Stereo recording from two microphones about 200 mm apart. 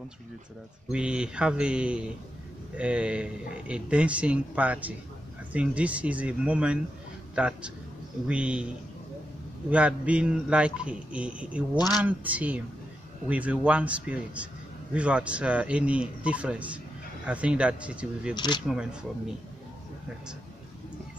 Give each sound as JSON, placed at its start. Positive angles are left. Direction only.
{"t": 0.9, "sound": "a man's voice", "side_deg": -5}
{"t": 9.7, "sound": "a man's voice", "side_deg": -5}
{"t": 18.3, "sound": "speech", "side_deg": 20}
{"t": 18.7, "sound": "a man's voice", "side_deg": -5}